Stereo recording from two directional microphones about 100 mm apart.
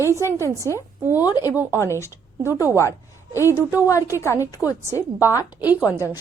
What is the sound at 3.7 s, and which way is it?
A woman's voice, 35° left (ahead or behind).